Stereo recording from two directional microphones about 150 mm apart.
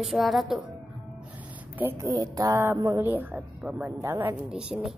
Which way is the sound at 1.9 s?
25° right (ahead or behind).